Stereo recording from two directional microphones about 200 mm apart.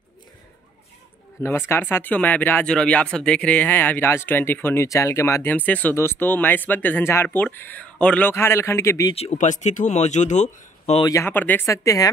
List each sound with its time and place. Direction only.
1.4 s speech: 10° left (ahead or behind)
9.1 s speech: 30° left (ahead or behind)
11.1 s speech: 10° left (ahead or behind)